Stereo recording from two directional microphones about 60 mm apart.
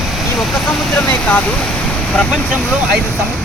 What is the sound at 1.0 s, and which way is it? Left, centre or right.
Speech, left.